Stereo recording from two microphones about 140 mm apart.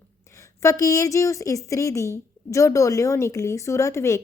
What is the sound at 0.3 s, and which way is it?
A woman's voice, 20° left (ahead or behind).